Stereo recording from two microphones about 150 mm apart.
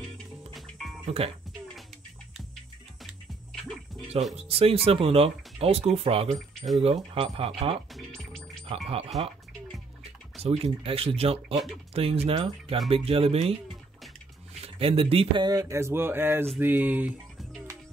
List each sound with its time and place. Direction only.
0.5 s music: centre (ahead or behind)
1.0 s speech: 40° right (ahead or behind)
4.4 s speech: 40° right (ahead or behind)
7.9 s music: centre (ahead or behind)
8.6 s speech: 40° right (ahead or behind)
10.4 s speech: 40° right (ahead or behind)
14.6 s speech: 40° right (ahead or behind); by 16.4 s 15° right (ahead or behind)
16.5 s a sound: 10° right (ahead or behind)
17.4 s music: centre (ahead or behind)